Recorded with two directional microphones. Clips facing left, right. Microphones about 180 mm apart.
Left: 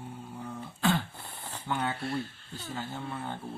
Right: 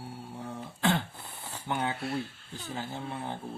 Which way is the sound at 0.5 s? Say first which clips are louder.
Even; 20° right (ahead or behind).